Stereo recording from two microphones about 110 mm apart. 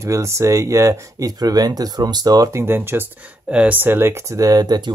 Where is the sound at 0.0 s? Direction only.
25° right (ahead or behind).